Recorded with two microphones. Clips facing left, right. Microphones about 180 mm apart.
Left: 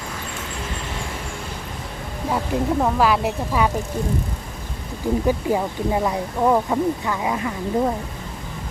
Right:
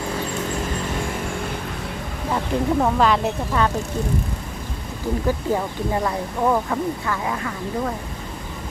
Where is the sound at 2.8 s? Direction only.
5° left (ahead or behind).